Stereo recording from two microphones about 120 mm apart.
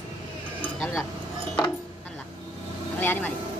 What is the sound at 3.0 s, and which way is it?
Vehicle, 15° left (ahead or behind).